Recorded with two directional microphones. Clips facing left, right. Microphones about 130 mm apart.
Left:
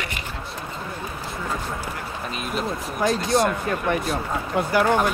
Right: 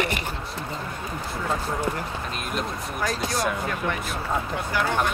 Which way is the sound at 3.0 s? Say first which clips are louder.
Left 7 dB; 25° left (ahead or behind).